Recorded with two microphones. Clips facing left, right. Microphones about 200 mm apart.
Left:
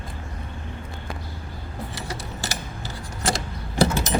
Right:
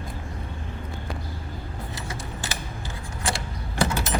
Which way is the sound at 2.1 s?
35° left (ahead or behind).